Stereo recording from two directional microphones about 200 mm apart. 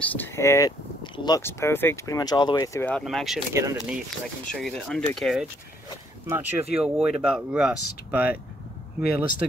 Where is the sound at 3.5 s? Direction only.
15° right (ahead or behind).